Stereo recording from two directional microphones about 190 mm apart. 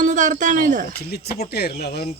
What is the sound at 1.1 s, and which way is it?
Speech, 55° left (ahead or behind).